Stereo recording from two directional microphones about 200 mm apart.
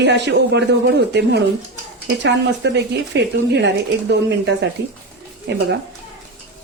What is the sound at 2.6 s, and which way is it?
Speech, 60° right (ahead or behind).